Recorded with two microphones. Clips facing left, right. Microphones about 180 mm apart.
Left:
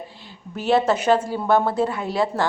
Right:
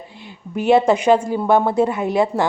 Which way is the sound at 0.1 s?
55° right (ahead or behind).